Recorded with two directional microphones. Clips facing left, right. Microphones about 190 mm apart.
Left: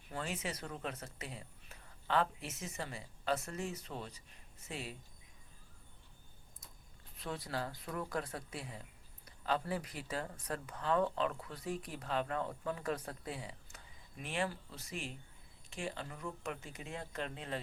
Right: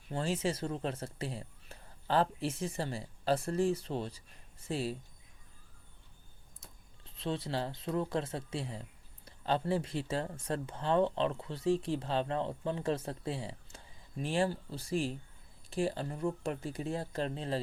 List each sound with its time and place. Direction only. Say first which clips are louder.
0.1 s speech: right 8 dB; 30° right (ahead or behind)
7.2 s speech: right 5 dB; 25° right (ahead or behind)